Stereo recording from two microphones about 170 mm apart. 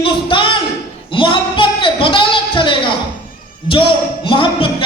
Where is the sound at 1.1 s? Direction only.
30° left (ahead or behind).